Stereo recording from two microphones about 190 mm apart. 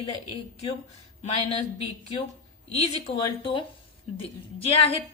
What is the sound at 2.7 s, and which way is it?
A woman's voice, 35° left (ahead or behind).